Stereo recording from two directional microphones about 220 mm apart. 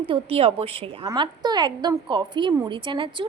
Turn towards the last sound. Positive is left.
turn(degrees=-20)  # may be behind; listen again after turning